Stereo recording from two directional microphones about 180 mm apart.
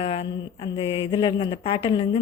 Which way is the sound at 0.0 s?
30° left (ahead or behind).